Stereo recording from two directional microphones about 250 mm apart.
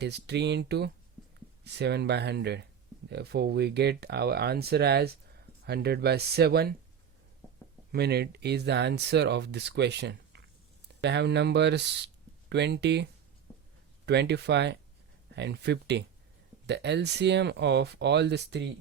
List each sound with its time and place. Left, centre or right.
0.0 s speech: right
7.9 s speech: right